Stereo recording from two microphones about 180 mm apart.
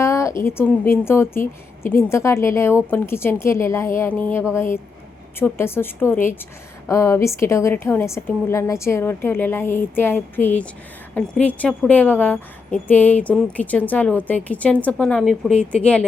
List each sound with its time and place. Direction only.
0.0 s a woman's voice: 15° left (ahead or behind)